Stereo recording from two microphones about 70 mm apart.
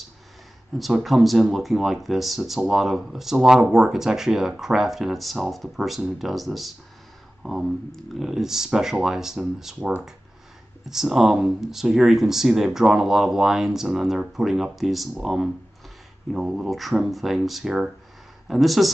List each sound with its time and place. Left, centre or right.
0.7 s speech: centre
9.8 s speech: right
10.9 s speech: centre